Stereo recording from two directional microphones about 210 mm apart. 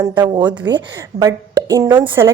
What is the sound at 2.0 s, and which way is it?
Speech, 25° right (ahead or behind).